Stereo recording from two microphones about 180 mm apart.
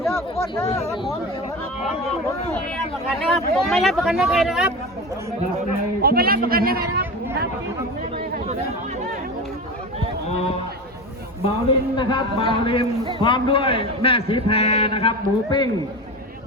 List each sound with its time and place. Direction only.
3.2 s speech: centre (ahead or behind)
6.0 s a man's voice: 60° right (ahead or behind)
11.9 s a man's voice: 25° left (ahead or behind)